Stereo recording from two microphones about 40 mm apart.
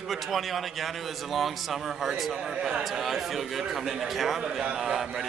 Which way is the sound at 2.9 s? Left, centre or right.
Centre.